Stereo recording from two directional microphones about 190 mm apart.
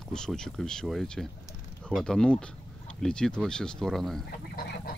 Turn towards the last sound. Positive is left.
turn(degrees=50)  # may be behind; listen again after turning